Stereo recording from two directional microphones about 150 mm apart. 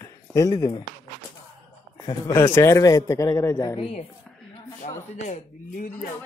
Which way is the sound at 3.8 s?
40° left (ahead or behind).